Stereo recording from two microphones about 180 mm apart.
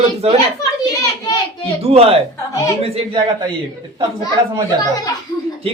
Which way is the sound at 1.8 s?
35° right (ahead or behind).